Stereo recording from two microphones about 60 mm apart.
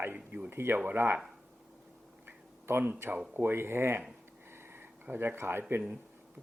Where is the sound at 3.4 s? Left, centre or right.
Right.